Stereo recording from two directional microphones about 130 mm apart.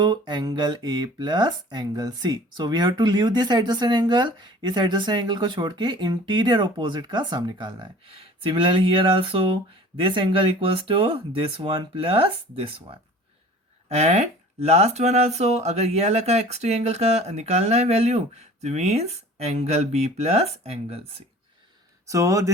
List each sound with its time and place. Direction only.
0.0 s speech: 35° right (ahead or behind); by 21.2 s 50° right (ahead or behind)
22.0 s speech: 25° right (ahead or behind)